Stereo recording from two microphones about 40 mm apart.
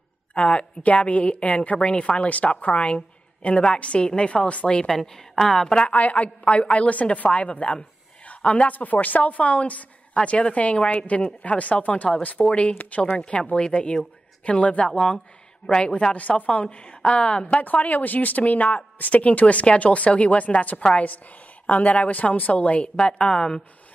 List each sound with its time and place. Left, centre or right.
0.3 s a woman's voice: left
4.8 s a woman's voice: centre
5.9 s a woman's voice: left
8.3 s a sound: left
8.7 s a woman's voice: left
10.1 s a woman's voice: left
16.1 s a woman's voice: left
17.6 s a woman's voice: left
20.7 s a woman's voice: left
21.6 s a woman's voice: left